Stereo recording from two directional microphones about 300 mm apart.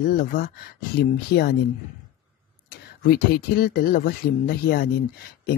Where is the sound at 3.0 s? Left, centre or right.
Left.